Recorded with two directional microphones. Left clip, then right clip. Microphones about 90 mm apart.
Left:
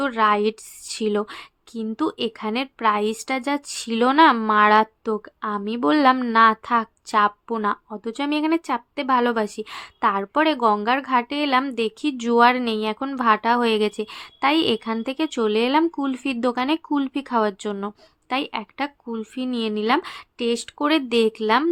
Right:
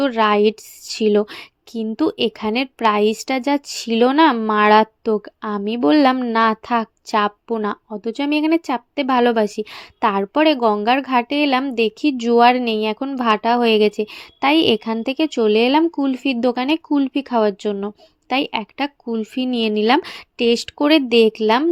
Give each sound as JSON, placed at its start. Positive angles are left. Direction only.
{"t": 0.0, "sound": "a woman's voice", "side_deg": -35}
{"t": 7.9, "sound": "a woman's voice", "side_deg": -25}
{"t": 12.1, "sound": "a woman's voice", "side_deg": -15}
{"t": 12.4, "sound": "a woman's voice", "side_deg": -30}
{"t": 15.9, "sound": "a woman's voice", "side_deg": -20}
{"t": 18.3, "sound": "a woman's voice", "side_deg": -35}